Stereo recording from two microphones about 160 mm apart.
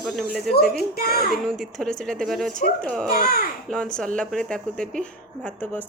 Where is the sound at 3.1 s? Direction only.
70° left (ahead or behind).